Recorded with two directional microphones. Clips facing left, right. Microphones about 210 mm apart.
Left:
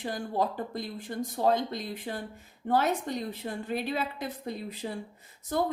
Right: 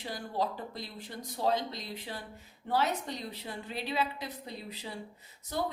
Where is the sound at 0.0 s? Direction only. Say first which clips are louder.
Left 4 dB; 50° left (ahead or behind).